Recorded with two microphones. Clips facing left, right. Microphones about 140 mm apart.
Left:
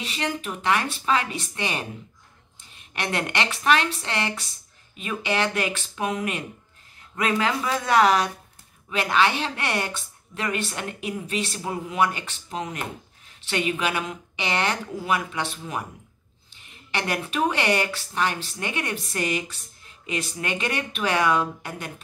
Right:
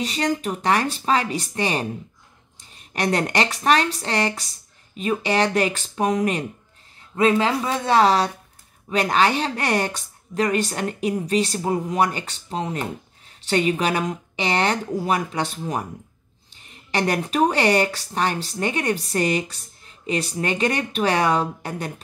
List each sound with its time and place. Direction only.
0.0 s a woman's voice: 35° right (ahead or behind)